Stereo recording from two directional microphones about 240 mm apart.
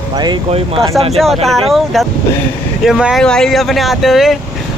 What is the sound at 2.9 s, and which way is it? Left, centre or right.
Speech, centre.